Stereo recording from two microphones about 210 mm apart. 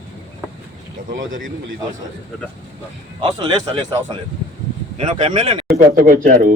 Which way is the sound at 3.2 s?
25° right (ahead or behind).